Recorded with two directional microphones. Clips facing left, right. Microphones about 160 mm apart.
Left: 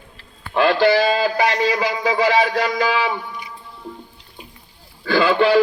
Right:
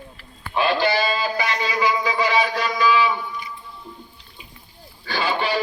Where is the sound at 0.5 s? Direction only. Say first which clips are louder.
Left 5 dB; 90° left; by 3.4 s 75° left (ahead or behind).